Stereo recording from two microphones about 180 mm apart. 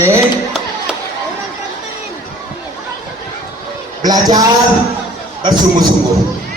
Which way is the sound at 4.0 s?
20° right (ahead or behind).